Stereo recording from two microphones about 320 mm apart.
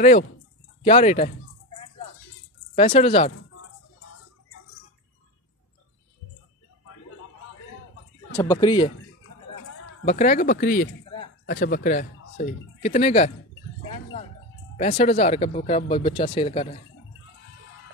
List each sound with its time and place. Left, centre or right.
0.8 s speech: centre
2.7 s speech: centre
8.4 s speech: centre
10.0 s speech: left
14.8 s speech: centre